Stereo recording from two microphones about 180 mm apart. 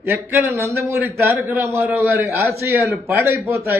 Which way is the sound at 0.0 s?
10° right (ahead or behind).